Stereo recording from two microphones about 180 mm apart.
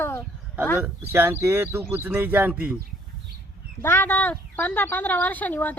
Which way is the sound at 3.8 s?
10° left (ahead or behind).